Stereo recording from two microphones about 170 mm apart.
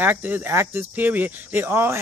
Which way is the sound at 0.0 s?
10° right (ahead or behind).